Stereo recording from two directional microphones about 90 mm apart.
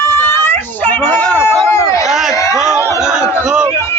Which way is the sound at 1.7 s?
35° left (ahead or behind).